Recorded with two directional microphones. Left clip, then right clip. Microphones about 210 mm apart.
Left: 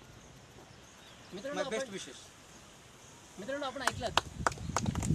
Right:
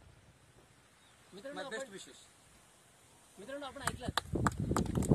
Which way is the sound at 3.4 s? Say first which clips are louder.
Left 6 dB; 10° left (ahead or behind).